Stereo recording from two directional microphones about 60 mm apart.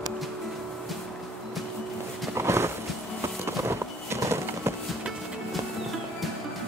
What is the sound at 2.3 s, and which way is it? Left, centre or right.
Horse, right.